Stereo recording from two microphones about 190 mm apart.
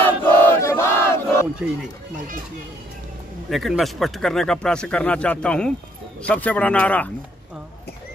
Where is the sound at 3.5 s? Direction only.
Centre (ahead or behind).